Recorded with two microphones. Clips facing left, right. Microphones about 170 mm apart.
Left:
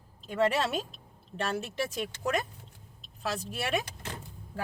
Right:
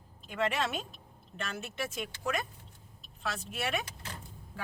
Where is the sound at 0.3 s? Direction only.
40° left (ahead or behind).